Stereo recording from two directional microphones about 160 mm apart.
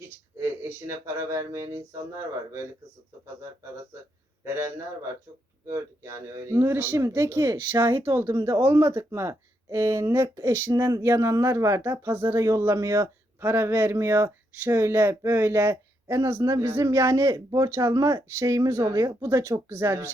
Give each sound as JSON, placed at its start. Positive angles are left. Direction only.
{"t": 0.3, "sound": "speech", "side_deg": -15}
{"t": 4.4, "sound": "speech", "side_deg": -15}